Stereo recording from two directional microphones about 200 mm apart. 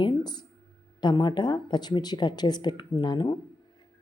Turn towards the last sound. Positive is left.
turn(degrees=20)  # may be behind; listen again after turning